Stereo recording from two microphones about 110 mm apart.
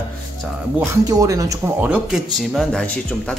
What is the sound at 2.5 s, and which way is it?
Speech, 5° left (ahead or behind).